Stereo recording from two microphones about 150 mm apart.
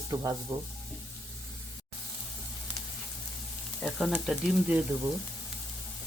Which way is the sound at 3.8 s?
Centre (ahead or behind).